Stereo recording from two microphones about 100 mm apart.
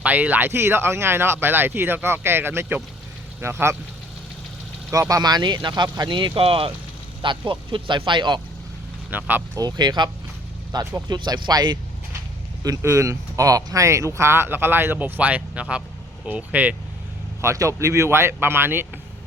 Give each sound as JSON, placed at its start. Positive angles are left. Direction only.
{"t": 0.0, "sound": "speech", "side_deg": -15}
{"t": 4.9, "sound": "speech", "side_deg": -35}
{"t": 7.2, "sound": "speech", "side_deg": -55}
{"t": 9.0, "sound": "speech", "side_deg": -20}
{"t": 9.6, "sound": "speech", "side_deg": -45}
{"t": 12.6, "sound": "speech", "side_deg": -35}
{"t": 17.4, "sound": "speech", "side_deg": -30}